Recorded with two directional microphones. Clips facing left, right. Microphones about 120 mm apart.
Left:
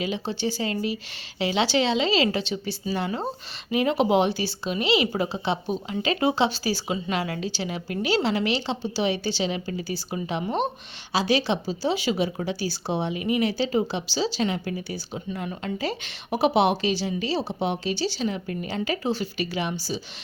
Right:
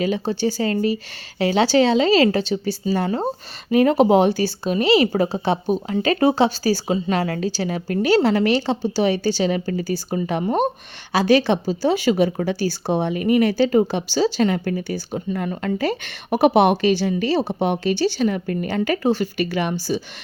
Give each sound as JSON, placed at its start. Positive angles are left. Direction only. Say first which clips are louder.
{"t": 0.0, "sound": "speech", "louder": "right 6 dB", "side_deg": -45}